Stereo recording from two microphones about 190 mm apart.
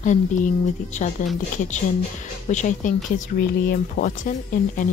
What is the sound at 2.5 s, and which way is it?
Speech, 40° left (ahead or behind).